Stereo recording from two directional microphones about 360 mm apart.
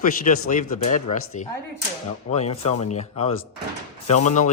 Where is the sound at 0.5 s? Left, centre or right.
Left.